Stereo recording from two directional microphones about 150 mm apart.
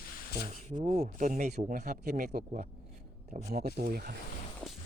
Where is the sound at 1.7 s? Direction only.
90° right.